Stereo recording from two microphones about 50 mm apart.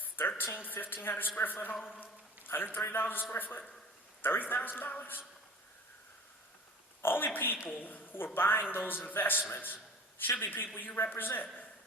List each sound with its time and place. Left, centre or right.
0.0 s a sound: left
1.0 s a man's voice: left
7.0 s a man's voice: left